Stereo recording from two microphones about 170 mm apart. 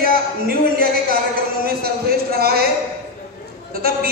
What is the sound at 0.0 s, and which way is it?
Speech, 60° right (ahead or behind).